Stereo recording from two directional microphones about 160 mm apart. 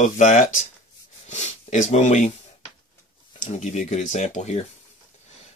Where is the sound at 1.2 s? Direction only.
45° left (ahead or behind).